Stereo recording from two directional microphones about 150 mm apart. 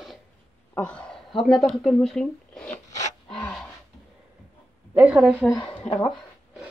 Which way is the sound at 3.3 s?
10° left (ahead or behind).